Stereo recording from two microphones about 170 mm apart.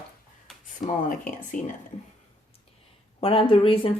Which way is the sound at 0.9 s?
50° left (ahead or behind).